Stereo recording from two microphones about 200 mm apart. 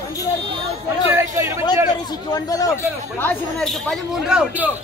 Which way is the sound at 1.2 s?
15° right (ahead or behind).